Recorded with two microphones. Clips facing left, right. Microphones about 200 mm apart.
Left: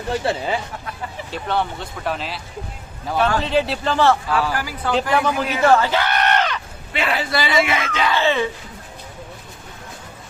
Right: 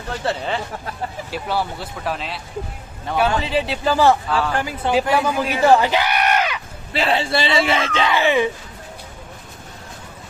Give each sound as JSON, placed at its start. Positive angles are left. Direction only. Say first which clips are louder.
{"t": 0.1, "sound": "speech", "louder": "left 2 dB", "side_deg": 10}
{"t": 1.3, "sound": "speech", "louder": "left 2 dB", "side_deg": -5}
{"t": 4.5, "sound": "a man's voice", "louder": "right 3 dB", "side_deg": -25}
{"t": 5.1, "sound": "speech", "louder": "even", "side_deg": -10}
{"t": 6.9, "sound": "a man's voice", "louder": "right 2 dB", "side_deg": -30}
{"t": 8.1, "sound": "speech", "louder": "right 2 dB", "side_deg": -15}